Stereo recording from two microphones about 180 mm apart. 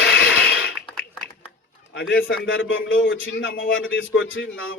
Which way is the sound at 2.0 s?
90° left.